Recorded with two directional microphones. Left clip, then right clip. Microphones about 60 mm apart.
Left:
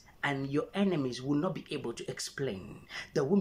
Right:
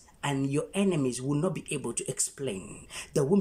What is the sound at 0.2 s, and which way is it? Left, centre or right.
Speech, right.